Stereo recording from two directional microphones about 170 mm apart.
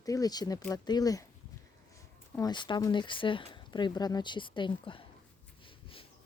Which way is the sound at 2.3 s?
25° left (ahead or behind).